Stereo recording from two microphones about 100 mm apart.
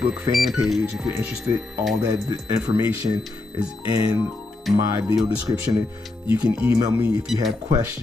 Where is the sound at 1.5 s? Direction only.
35° right (ahead or behind).